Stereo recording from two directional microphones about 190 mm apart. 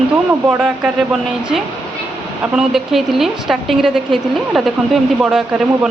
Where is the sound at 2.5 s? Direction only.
Centre (ahead or behind).